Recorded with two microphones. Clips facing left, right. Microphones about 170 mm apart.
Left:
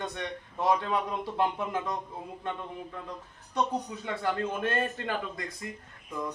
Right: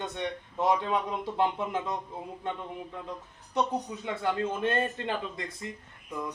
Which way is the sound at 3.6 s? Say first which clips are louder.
Right 1 dB; 20° right (ahead or behind).